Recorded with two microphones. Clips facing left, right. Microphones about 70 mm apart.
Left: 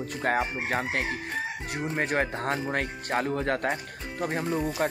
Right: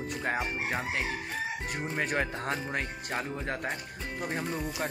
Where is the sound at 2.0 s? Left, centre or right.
Left.